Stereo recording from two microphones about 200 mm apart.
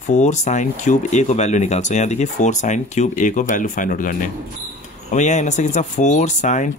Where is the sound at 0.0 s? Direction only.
35° left (ahead or behind).